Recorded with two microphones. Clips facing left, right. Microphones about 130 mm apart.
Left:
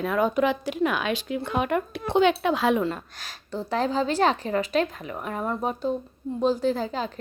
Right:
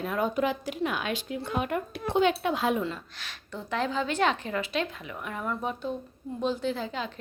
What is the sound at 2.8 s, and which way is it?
A woman's voice, 45° left (ahead or behind).